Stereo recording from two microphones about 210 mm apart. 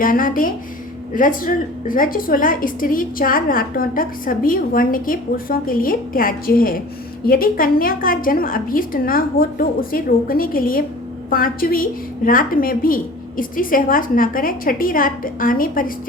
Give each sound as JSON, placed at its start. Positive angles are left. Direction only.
{"t": 0.0, "sound": "a woman's voice", "side_deg": 40}